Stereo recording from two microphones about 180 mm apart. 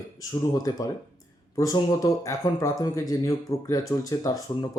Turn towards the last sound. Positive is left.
turn(degrees=20)  # may be behind; listen again after turning